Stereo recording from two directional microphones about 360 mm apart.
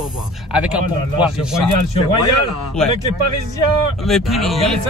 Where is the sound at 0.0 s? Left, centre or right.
Centre.